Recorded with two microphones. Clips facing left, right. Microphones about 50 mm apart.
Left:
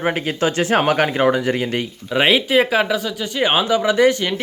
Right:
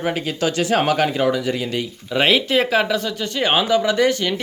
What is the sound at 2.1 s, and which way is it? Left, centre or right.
Speech, centre.